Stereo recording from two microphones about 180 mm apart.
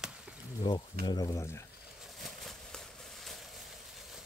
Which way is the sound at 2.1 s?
Centre (ahead or behind).